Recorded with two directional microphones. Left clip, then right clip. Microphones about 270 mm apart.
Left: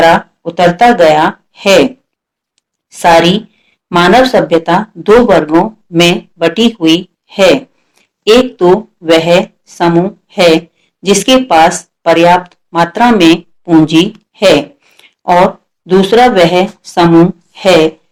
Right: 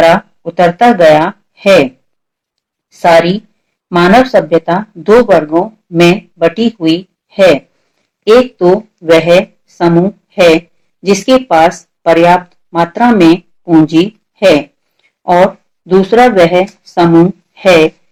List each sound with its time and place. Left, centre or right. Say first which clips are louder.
0.1 s speech: left 1 dB; left
2.6 s a sound: even; left
3.8 s speech: left 1 dB; left